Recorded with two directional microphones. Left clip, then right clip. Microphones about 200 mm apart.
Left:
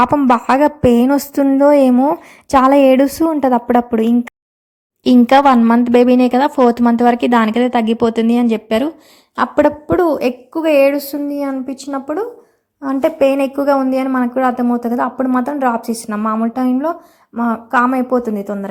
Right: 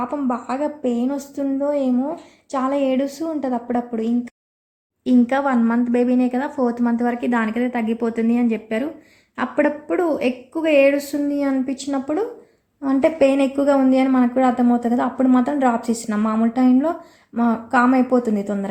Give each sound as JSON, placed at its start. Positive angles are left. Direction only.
{"t": 0.0, "sound": "a woman's voice", "side_deg": 50}